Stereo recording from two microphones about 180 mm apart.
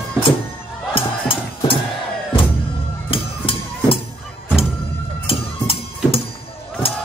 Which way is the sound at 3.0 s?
30° left (ahead or behind).